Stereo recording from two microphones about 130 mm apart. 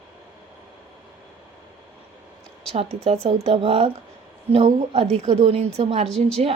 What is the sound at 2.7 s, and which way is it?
Speech, 55° right (ahead or behind).